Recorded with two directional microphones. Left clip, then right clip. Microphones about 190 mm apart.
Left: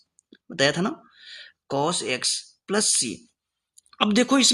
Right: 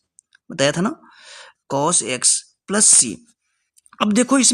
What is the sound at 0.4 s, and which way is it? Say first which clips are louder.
A woman's voice: right 3 dB; 40° right (ahead or behind).